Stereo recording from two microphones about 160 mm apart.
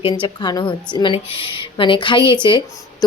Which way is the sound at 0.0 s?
30° left (ahead or behind).